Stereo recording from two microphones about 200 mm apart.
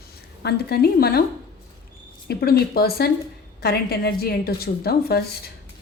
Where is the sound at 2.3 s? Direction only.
50° left (ahead or behind).